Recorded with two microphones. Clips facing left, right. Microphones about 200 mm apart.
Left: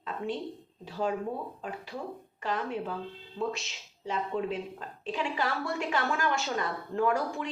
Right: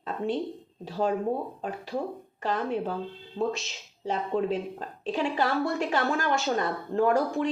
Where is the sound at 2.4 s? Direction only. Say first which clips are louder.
Right 4 dB; 40° right (ahead or behind).